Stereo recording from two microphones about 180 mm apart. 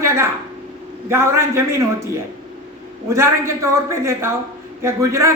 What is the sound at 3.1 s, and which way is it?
A man's voice, 15° right (ahead or behind).